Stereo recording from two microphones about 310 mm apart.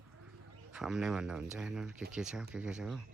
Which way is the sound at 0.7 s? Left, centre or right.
Centre.